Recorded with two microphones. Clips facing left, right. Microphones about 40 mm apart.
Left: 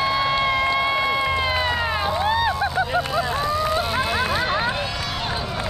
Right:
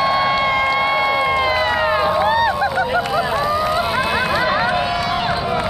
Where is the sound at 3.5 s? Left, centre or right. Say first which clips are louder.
Right 4 dB; centre.